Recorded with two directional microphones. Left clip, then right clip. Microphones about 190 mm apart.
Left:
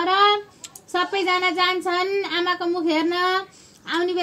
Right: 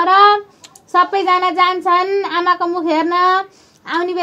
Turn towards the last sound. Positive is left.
turn(degrees=25)  # may be behind; listen again after turning